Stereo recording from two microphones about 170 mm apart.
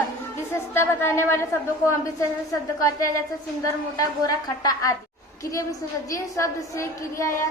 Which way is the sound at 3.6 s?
20° left (ahead or behind).